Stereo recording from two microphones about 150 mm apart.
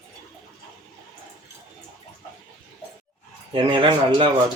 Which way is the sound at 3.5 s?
35° right (ahead or behind).